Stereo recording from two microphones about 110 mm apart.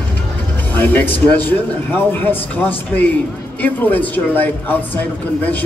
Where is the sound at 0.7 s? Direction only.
15° left (ahead or behind).